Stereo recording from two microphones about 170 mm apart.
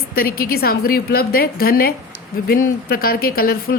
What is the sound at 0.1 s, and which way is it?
A woman's voice, 60° left (ahead or behind).